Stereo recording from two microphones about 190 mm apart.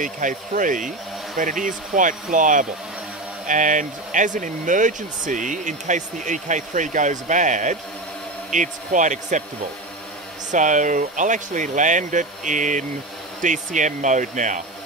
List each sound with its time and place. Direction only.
0.0 s speech: 45° right (ahead or behind)
10.5 s speech: 40° right (ahead or behind)